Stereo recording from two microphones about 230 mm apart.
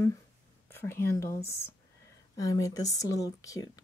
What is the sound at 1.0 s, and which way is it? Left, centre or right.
A woman's voice, centre.